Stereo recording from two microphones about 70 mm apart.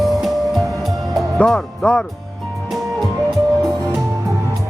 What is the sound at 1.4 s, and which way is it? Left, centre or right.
Speech, centre.